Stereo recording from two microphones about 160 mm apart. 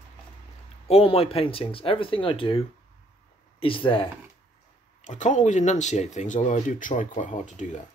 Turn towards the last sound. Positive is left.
turn(degrees=50)  # may be behind; listen again after turning